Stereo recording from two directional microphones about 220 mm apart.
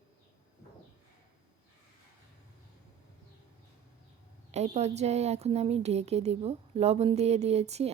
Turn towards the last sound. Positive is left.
turn(degrees=-30)  # may be behind; listen again after turning